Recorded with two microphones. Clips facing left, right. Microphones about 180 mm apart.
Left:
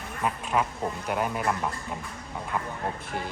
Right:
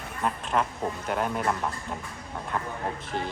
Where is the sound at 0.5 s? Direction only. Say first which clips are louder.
Even; 10° left (ahead or behind).